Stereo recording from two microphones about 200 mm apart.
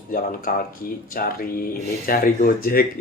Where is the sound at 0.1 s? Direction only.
45° left (ahead or behind).